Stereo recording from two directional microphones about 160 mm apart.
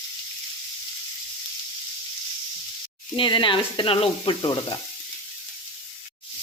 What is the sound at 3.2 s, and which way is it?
Sizzle, 30° left (ahead or behind).